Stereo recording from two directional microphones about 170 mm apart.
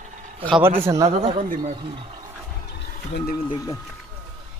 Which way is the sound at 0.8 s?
15° right (ahead or behind).